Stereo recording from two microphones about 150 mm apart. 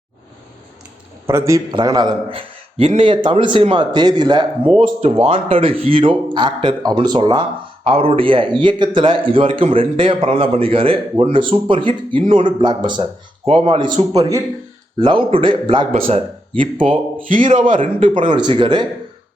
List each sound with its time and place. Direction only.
1.3 s a man's voice: 20° right (ahead or behind); by 4.9 s 35° right (ahead or behind)
4.9 s a man's voice: 45° right (ahead or behind); by 14.4 s 25° right (ahead or behind)
15.0 s a man's voice: 35° right (ahead or behind)